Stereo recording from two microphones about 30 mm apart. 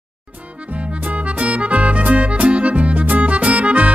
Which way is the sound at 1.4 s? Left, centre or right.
Right.